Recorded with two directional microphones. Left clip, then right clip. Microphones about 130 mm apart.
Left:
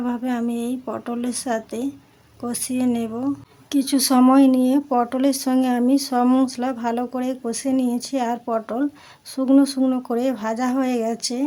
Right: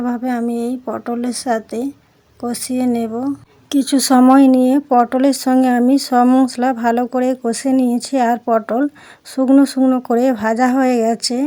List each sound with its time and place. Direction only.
0.0 s a woman's voice: 25° right (ahead or behind)
3.7 s speech: 35° right (ahead or behind)
4.4 s speech: 35° right (ahead or behind)